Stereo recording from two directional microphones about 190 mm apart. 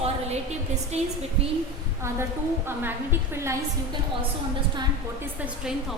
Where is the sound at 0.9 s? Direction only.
35° right (ahead or behind).